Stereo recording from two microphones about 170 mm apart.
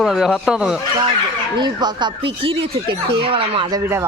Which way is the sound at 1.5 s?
25° right (ahead or behind).